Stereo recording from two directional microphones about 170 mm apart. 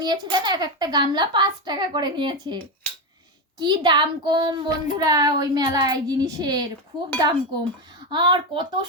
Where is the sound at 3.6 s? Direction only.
25° right (ahead or behind).